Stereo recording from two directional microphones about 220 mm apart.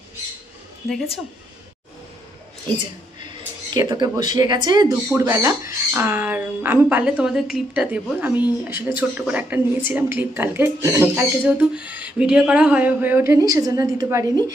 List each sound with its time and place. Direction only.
3.2 s speech: 20° right (ahead or behind)